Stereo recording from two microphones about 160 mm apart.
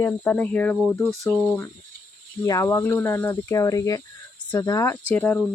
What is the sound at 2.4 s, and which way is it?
Speech, 20° left (ahead or behind).